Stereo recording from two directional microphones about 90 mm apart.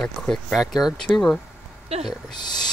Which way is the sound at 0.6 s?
5° right (ahead or behind).